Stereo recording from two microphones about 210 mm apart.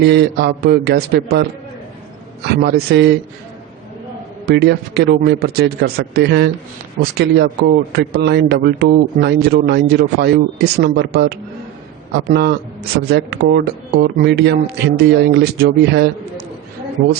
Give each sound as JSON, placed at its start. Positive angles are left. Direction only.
{"t": 0.0, "sound": "a man's voice", "side_deg": -50}
{"t": 4.4, "sound": "a man's voice", "side_deg": -50}